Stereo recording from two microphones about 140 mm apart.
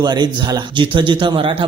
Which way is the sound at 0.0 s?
30° right (ahead or behind).